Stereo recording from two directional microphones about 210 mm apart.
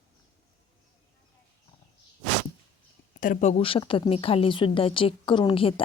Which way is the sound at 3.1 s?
40° left (ahead or behind).